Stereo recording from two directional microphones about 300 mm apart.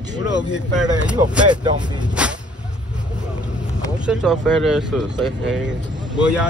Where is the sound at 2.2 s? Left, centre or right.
Centre.